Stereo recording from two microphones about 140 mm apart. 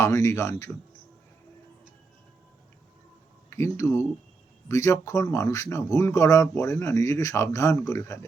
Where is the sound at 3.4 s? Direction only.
20° left (ahead or behind).